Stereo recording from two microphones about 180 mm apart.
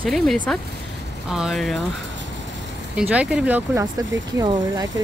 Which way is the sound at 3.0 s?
5° right (ahead or behind).